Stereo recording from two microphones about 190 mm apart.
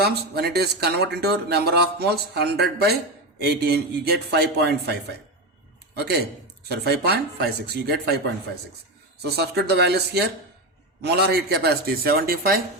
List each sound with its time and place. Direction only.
0.0 s speech: 55° right (ahead or behind)
9.3 s a man's voice: 60° right (ahead or behind)